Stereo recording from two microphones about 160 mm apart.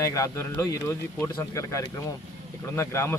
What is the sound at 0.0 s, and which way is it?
Speech, 20° left (ahead or behind).